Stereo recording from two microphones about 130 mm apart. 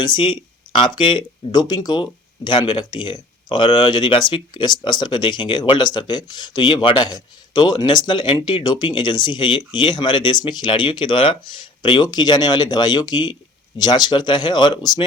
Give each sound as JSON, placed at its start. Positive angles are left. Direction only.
{"t": 0.0, "sound": "speech", "side_deg": 40}